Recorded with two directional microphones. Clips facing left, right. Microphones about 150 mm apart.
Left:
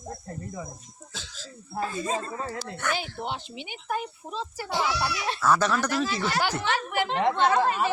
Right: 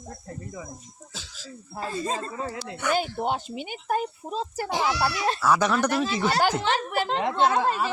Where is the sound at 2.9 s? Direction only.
45° right (ahead or behind).